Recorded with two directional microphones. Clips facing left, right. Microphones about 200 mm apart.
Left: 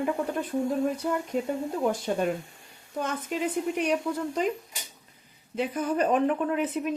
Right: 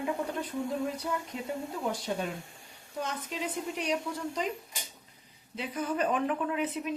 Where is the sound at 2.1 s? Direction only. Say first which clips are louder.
Left 7 dB; 55° left (ahead or behind).